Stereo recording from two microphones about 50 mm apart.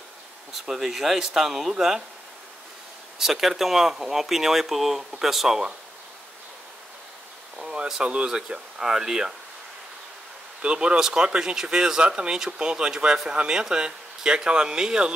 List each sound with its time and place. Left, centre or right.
0.5 s speech: centre
3.2 s speech: centre
7.5 s speech: centre
10.6 s speech: right